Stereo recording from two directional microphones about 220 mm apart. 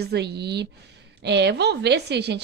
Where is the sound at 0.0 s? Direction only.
50° right (ahead or behind).